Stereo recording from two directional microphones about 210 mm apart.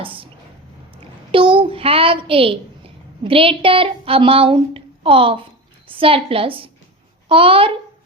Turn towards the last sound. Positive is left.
turn(degrees=-25)  # may be behind; listen again after turning